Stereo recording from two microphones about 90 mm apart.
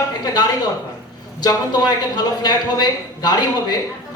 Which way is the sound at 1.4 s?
50° left (ahead or behind).